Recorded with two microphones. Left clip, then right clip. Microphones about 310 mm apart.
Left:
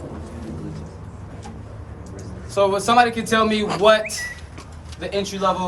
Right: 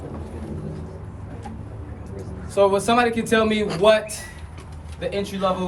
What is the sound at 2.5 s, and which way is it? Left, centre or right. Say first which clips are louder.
A man's voice: left 2 dB; centre.